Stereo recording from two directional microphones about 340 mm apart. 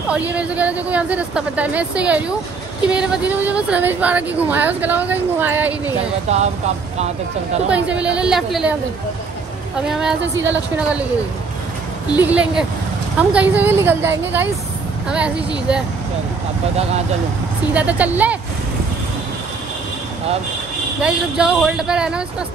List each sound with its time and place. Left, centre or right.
0.1 s speech: centre
6.3 s speech: centre
7.6 s speech: centre
9.8 s speech: centre
12.2 s speech: centre
17.7 s speech: centre
21.0 s speech: centre